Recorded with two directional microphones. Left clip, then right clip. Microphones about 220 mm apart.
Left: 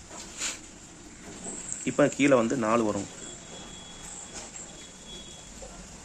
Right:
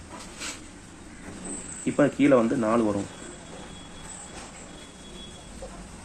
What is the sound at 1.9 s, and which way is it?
Speech, 15° left (ahead or behind).